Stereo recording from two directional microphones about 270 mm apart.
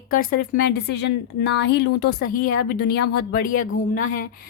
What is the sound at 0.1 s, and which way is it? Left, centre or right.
A woman's voice, left.